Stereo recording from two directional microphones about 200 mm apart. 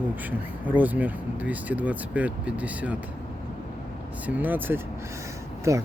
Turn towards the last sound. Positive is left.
turn(degrees=-15)  # may be behind; listen again after turning